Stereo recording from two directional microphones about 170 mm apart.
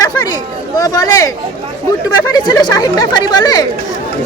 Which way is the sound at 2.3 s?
25° left (ahead or behind).